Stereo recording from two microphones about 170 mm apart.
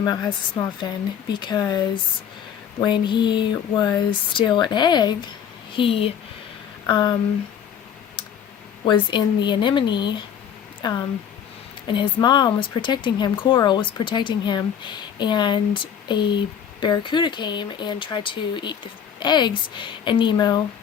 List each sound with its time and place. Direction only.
0.0 s speech: 20° left (ahead or behind)
2.8 s speech: 25° left (ahead or behind)
8.8 s speech: 25° left (ahead or behind)